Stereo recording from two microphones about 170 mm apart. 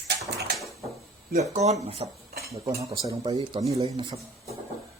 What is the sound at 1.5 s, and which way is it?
Speech, 40° right (ahead or behind).